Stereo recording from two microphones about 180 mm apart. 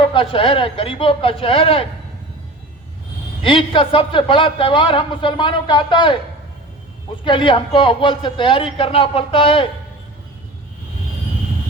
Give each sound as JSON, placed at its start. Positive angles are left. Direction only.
{"t": 0.0, "sound": "speech", "side_deg": 30}
{"t": 3.4, "sound": "speech", "side_deg": 30}
{"t": 7.3, "sound": "speech", "side_deg": 25}